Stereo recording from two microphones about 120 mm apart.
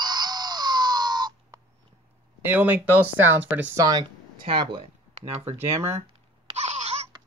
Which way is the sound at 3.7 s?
30° right (ahead or behind).